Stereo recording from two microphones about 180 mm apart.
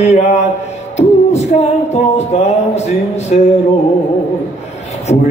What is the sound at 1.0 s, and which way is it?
Music, 40° left (ahead or behind).